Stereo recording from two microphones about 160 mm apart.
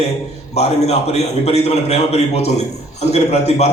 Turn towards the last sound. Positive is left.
turn(degrees=40)  # may be behind; listen again after turning